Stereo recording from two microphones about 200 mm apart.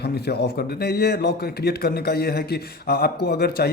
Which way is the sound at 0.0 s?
55° left (ahead or behind).